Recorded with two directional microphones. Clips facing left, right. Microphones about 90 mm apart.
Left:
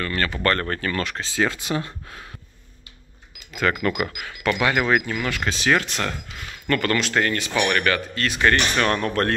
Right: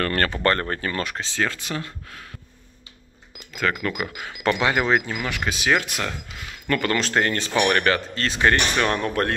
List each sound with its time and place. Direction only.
0.0 s speech: 50° right (ahead or behind)
0.3 s speech: 25° right (ahead or behind)
1.2 s speech: 5° left (ahead or behind)
1.5 s speech: 20° left (ahead or behind)
3.5 s speech: centre (ahead or behind)
4.1 s speech: 25° right (ahead or behind)
7.0 s speech: 30° right (ahead or behind)
8.4 s speech: 15° right (ahead or behind)